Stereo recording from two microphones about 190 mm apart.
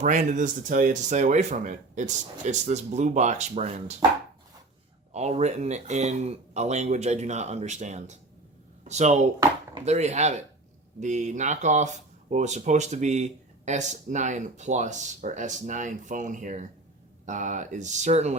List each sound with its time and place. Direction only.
0.0 s speech: 40° right (ahead or behind)
5.1 s speech: 35° right (ahead or behind)